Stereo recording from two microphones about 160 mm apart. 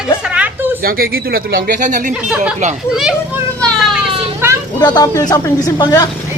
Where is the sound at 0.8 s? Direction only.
65° right (ahead or behind).